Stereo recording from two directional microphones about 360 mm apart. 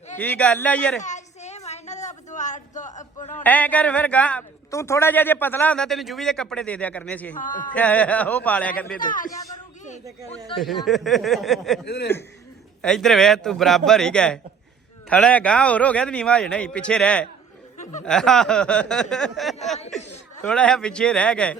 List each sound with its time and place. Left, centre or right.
0.2 s a man's voice: centre
0.9 s a sound: centre
3.4 s a man's voice: centre
7.3 s a man's voice: left
7.7 s a man's voice: centre
9.0 s a man's voice: left
10.5 s speech: centre
10.8 s a man's voice: centre
11.9 s a man's voice: left
12.8 s a man's voice: centre